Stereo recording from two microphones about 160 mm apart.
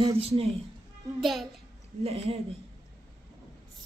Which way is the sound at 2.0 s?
40° right (ahead or behind).